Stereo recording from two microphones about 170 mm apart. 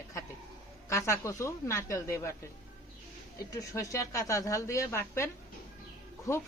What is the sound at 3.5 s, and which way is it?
A woman's voice, 20° left (ahead or behind).